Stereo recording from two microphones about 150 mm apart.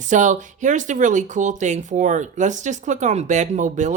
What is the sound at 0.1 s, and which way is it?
Speech, 55° right (ahead or behind).